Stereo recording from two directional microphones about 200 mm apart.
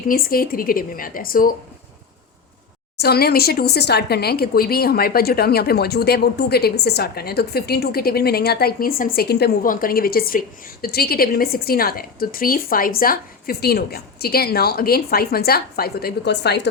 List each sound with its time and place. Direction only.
0.1 s speech: 45° left (ahead or behind)
3.0 s speech: 50° left (ahead or behind)